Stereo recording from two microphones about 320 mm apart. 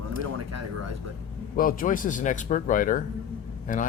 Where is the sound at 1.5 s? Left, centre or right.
Left.